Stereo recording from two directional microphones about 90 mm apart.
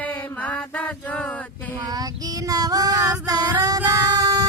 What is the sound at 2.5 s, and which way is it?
Music, 45° right (ahead or behind).